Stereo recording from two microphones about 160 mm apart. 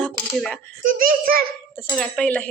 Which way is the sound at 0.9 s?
60° right (ahead or behind).